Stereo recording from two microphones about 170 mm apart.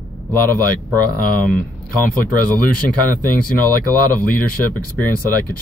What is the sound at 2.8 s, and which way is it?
Speech, 10° left (ahead or behind).